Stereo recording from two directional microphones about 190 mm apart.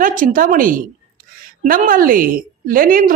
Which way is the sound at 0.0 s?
45° right (ahead or behind).